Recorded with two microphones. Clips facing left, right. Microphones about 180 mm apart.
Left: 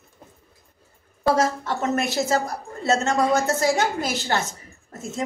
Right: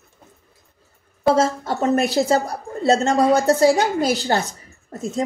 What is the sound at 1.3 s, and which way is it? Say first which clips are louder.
A woman's voice: right 3 dB; 30° right (ahead or behind).